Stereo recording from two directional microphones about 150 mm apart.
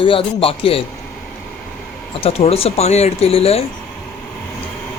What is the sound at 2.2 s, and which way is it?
Speech, 40° left (ahead or behind).